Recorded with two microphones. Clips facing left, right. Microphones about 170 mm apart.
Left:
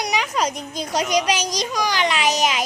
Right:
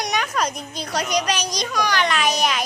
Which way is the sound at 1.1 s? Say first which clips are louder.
Left 2 dB; 90° left.